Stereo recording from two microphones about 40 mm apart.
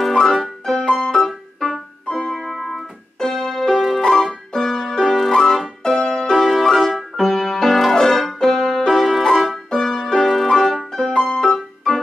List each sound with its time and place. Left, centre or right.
0.0 s piano: centre
2.1 s keyboard: centre
2.5 s music: centre
3.2 s keyboard: centre
5.0 s music: centre
6.3 s music: centre